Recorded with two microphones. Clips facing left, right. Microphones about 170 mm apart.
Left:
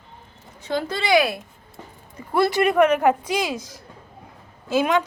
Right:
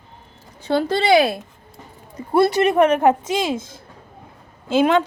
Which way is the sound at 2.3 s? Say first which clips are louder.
Right 3 dB; 25° right (ahead or behind).